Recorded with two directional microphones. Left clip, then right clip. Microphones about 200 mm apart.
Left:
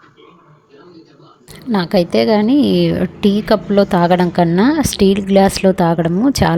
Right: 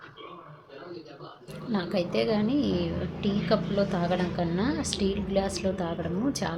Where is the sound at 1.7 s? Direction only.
45° left (ahead or behind).